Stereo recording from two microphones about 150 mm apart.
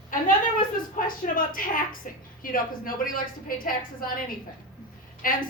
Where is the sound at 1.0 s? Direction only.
70° left (ahead or behind).